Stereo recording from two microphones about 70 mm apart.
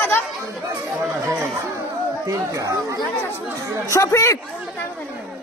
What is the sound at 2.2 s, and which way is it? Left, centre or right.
Speech, right.